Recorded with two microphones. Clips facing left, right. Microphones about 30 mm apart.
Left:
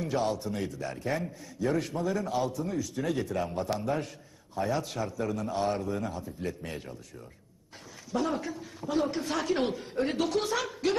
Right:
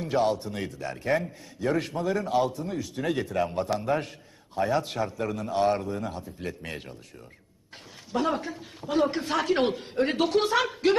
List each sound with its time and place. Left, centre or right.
0.0 s a man's voice: right
8.1 s a man's voice: right